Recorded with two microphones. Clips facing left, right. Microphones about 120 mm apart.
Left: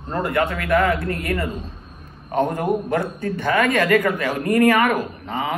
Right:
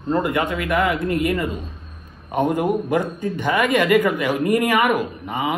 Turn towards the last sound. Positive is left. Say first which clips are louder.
# right 2 dB
turn(degrees=-15)  # may be behind; listen again after turning